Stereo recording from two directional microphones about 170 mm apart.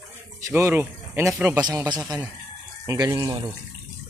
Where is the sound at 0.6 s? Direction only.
15° right (ahead or behind).